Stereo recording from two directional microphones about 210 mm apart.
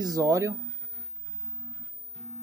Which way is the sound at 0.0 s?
15° right (ahead or behind).